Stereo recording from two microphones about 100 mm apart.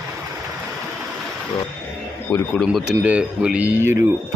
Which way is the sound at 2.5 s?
Centre (ahead or behind).